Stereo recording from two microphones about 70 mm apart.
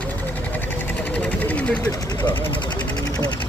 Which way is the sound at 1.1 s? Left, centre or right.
Left.